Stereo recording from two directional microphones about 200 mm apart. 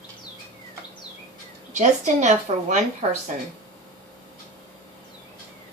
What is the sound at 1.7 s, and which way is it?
A woman's voice, 35° right (ahead or behind).